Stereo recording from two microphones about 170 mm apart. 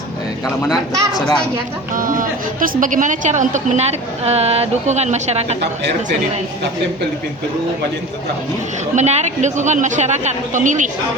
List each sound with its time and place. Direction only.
0.6 s speech: centre (ahead or behind)
1.9 s a woman's voice: 55° right (ahead or behind)
9.0 s a woman's voice: 40° right (ahead or behind)